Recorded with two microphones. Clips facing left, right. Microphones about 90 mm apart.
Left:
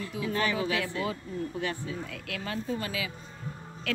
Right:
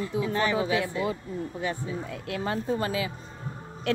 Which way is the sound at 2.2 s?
30° right (ahead or behind).